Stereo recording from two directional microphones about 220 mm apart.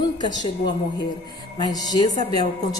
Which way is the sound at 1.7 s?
20° left (ahead or behind).